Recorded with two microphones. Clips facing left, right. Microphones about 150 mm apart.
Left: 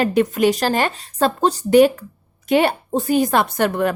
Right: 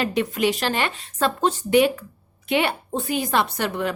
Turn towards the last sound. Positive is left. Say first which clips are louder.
# left 6 dB
turn(degrees=50)  # may be behind; listen again after turning